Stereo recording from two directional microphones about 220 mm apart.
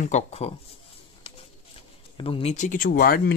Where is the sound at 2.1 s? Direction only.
25° left (ahead or behind); by 3.3 s 45° left (ahead or behind).